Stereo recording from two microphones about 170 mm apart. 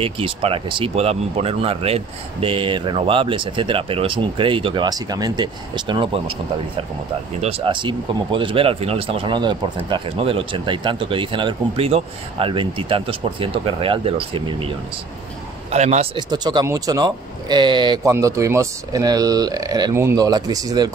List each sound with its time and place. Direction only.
0.0 s speech: 35° right (ahead or behind)
7.4 s speech: 30° right (ahead or behind)
15.7 s speech: 40° right (ahead or behind)
16.2 s speech: 25° right (ahead or behind)